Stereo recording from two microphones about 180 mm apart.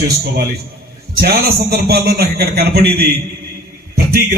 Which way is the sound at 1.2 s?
60° right (ahead or behind).